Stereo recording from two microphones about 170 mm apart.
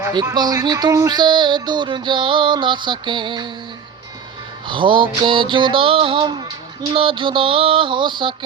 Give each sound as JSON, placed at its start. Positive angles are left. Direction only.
{"t": 0.1, "sound": "speech", "side_deg": -25}
{"t": 4.7, "sound": "speech", "side_deg": -30}
{"t": 6.9, "sound": "a sound", "side_deg": -30}